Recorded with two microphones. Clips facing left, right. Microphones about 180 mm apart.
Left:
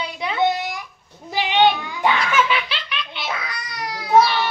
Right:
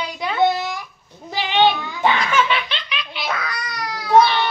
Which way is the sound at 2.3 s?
5° left (ahead or behind).